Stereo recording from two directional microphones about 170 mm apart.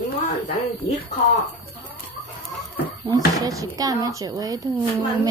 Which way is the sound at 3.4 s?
20° right (ahead or behind).